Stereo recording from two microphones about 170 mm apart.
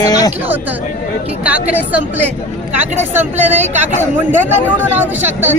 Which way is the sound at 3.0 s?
10° right (ahead or behind).